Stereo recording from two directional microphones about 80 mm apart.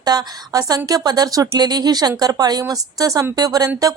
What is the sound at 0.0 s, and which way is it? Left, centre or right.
Speech, right.